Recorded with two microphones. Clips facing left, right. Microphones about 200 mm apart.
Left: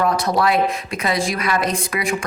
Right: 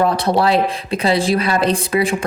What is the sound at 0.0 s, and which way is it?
Speech, 30° right (ahead or behind).